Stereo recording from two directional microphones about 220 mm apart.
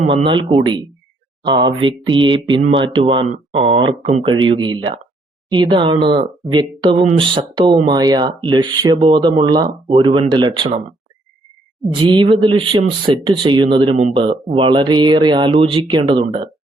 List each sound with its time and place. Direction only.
0.1 s speech: 25° right (ahead or behind)
11.9 s speech: 20° right (ahead or behind)